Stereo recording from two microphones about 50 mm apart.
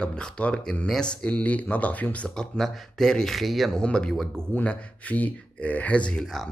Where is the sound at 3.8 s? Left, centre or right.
Centre.